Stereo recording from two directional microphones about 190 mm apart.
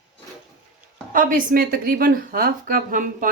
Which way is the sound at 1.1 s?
45° right (ahead or behind).